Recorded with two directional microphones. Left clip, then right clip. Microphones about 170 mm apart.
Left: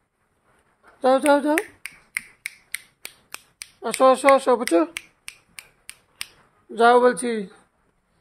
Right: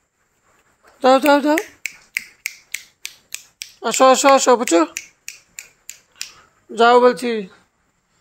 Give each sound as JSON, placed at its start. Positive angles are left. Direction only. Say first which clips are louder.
{"t": 0.9, "sound": "speech", "louder": "right 5 dB", "side_deg": -15}
{"t": 2.4, "sound": "finger snapping", "louder": "right 6 dB", "side_deg": 50}
{"t": 3.8, "sound": "speech", "louder": "right 4 dB", "side_deg": -10}
{"t": 6.7, "sound": "speech", "louder": "right 4 dB", "side_deg": -10}